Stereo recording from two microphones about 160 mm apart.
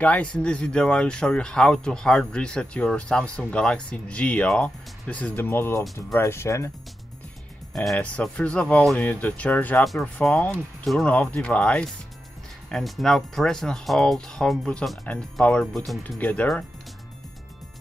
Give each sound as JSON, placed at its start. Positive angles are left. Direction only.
{"t": 0.0, "sound": "speech", "side_deg": 10}
{"t": 7.7, "sound": "speech", "side_deg": 0}